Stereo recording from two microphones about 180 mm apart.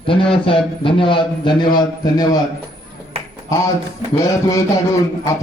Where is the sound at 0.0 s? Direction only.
30° left (ahead or behind).